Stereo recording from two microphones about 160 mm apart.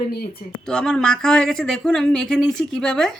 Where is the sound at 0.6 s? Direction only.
5° left (ahead or behind).